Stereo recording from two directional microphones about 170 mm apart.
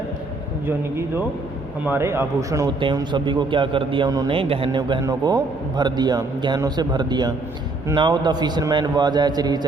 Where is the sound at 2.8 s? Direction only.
30° right (ahead or behind).